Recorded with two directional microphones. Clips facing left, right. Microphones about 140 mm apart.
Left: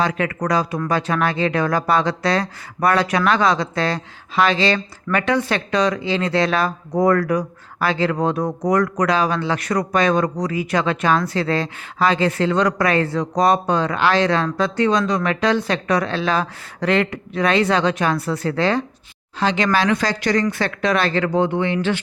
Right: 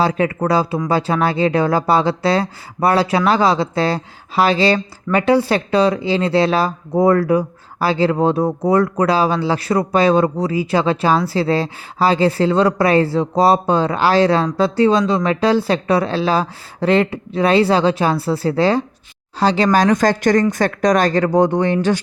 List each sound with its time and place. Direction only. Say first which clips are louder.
0.0 s speech: right 4 dB; 30° right (ahead or behind)